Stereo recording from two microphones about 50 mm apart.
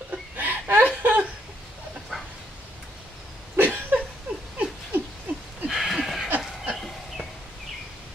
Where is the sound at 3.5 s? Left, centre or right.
Right.